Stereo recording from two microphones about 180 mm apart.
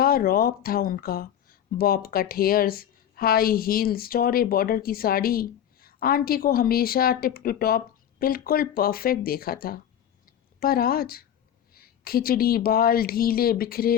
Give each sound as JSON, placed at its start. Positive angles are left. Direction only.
{"t": 0.0, "sound": "speech", "side_deg": 55}
{"t": 10.2, "sound": "a sound", "side_deg": 55}
{"t": 11.7, "sound": "speech", "side_deg": 55}